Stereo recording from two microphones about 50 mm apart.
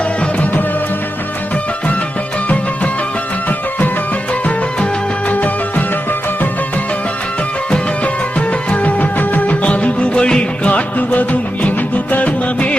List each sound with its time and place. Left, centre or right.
5.3 s music: left
7.7 s music: left
10.7 s music: left